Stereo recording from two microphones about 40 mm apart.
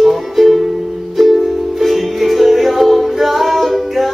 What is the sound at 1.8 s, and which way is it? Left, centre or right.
Music, centre.